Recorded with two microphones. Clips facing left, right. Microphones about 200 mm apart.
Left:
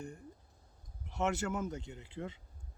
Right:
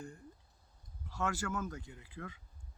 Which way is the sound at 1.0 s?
20° left (ahead or behind).